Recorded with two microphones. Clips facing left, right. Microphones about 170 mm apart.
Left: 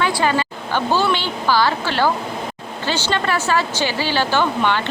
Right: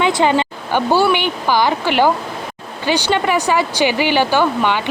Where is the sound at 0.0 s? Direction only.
20° right (ahead or behind).